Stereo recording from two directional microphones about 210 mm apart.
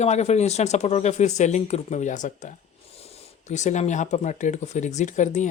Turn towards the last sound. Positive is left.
turn(degrees=35)  # may be behind; listen again after turning